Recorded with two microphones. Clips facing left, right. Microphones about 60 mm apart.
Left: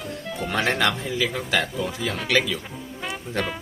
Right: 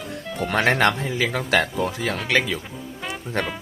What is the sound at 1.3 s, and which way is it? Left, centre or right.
Speech, right.